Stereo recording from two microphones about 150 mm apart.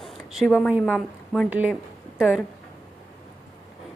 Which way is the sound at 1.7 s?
5° right (ahead or behind).